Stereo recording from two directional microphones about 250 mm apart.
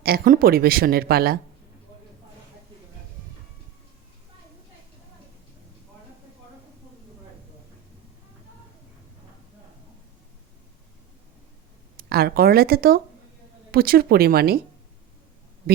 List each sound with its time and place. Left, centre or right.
0.0 s speech: right
11.9 s speech: right